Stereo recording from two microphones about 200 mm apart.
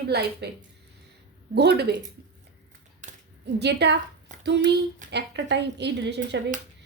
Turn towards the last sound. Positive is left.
turn(degrees=-60)  # may be behind; listen again after turning